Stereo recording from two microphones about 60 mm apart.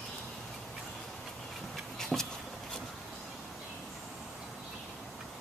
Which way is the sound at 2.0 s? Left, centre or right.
Centre.